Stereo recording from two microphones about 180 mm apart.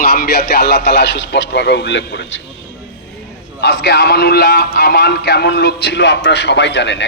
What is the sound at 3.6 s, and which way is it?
A man's voice, 70° left (ahead or behind).